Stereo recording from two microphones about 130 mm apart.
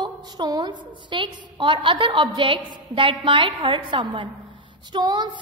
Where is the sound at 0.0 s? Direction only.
35° right (ahead or behind).